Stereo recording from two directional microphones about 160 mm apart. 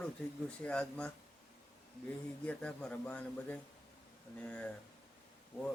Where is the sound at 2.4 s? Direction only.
5° left (ahead or behind).